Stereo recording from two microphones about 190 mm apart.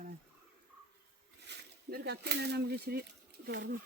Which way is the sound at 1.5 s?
60° right (ahead or behind).